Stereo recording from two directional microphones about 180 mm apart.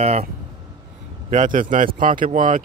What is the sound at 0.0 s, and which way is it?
Speech, 35° right (ahead or behind).